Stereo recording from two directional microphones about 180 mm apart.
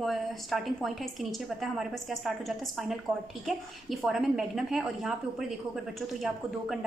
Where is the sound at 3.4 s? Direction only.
Centre (ahead or behind).